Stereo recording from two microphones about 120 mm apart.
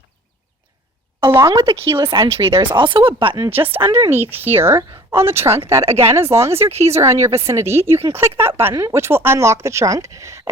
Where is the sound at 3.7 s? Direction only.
20° right (ahead or behind).